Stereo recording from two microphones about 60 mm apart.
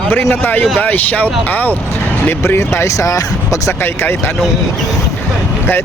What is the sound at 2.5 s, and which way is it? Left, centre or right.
Speech, left.